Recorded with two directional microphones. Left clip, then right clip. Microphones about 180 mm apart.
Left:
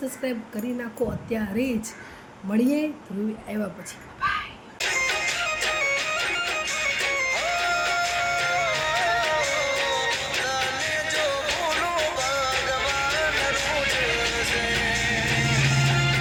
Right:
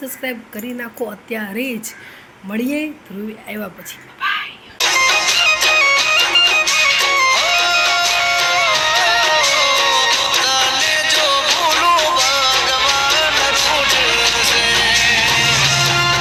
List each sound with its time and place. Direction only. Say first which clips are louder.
0.2 s speech: right 4 dB; 5° right (ahead or behind)
4.2 s a sound: right 6 dB; centre (ahead or behind)
4.8 s music: right 10 dB; 40° right (ahead or behind)